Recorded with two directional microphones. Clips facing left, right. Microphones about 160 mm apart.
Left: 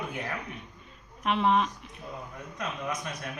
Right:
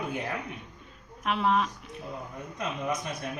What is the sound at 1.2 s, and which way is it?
Speech, centre (ahead or behind).